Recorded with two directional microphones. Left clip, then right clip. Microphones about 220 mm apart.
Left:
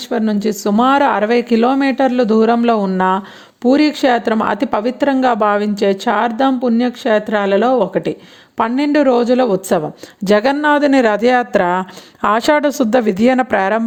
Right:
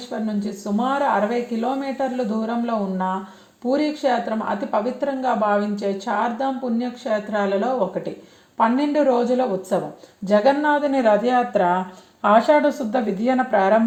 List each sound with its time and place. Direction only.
0.1 s speech: 45° left (ahead or behind)